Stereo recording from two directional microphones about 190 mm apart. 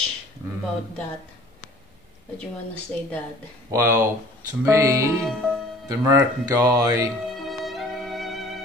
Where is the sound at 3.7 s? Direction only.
15° right (ahead or behind).